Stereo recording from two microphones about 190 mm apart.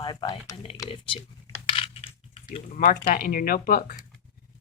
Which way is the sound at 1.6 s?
30° left (ahead or behind).